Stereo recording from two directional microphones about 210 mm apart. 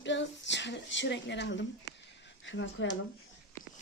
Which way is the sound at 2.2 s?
65° left (ahead or behind).